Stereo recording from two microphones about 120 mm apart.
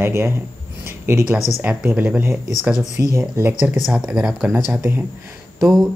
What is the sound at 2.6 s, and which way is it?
Speech, centre (ahead or behind).